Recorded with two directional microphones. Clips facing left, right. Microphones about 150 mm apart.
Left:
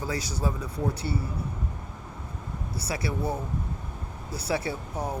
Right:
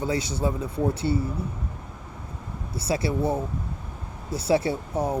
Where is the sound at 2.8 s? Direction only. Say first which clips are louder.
Right 6 dB; 25° right (ahead or behind).